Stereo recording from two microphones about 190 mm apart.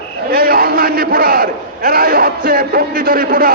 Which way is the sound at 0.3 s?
50° right (ahead or behind).